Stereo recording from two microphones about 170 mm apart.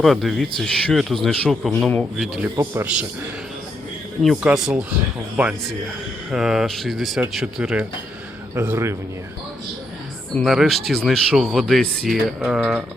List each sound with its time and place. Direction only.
0.0 s speech: centre (ahead or behind)
4.2 s a man's voice: centre (ahead or behind)
10.3 s speech: centre (ahead or behind)